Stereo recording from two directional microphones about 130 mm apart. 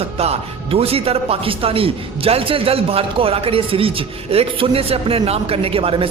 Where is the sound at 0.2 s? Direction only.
50° right (ahead or behind).